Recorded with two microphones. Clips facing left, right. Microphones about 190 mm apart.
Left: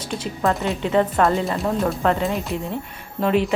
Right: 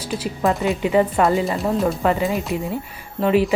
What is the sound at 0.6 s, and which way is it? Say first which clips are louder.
Speech: right 4 dB; 5° right (ahead or behind).